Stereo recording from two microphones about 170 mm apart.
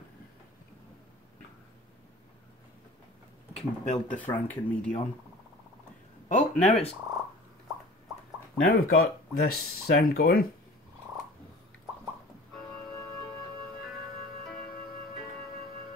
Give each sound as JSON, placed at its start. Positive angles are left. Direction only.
{"t": 3.5, "sound": "speech", "side_deg": 45}
{"t": 4.2, "sound": "speech", "side_deg": 10}
{"t": 6.2, "sound": "speech", "side_deg": 45}
{"t": 8.6, "sound": "speech", "side_deg": 60}